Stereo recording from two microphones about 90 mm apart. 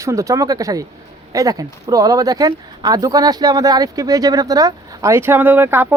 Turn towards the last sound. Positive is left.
turn(degrees=-25)  # may be behind; listen again after turning